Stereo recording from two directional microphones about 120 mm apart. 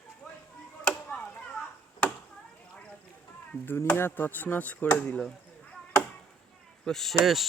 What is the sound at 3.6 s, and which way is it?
Speech, 15° left (ahead or behind).